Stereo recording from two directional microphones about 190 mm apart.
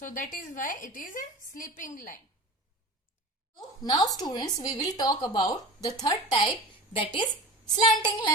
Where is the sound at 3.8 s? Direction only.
20° left (ahead or behind).